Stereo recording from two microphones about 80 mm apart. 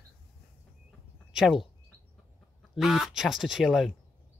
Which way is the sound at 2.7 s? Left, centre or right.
Centre.